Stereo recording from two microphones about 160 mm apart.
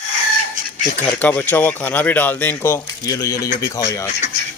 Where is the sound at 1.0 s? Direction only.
10° left (ahead or behind).